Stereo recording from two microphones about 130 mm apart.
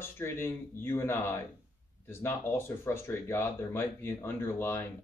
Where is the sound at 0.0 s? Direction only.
20° left (ahead or behind).